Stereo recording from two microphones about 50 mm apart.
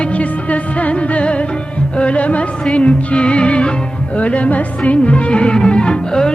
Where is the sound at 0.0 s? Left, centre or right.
Left.